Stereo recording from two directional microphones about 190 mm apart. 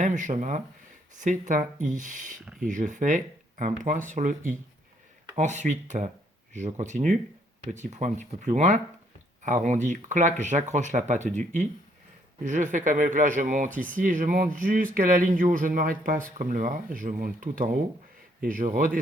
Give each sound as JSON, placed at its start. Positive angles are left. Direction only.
{"t": 0.0, "sound": "speech", "side_deg": -40}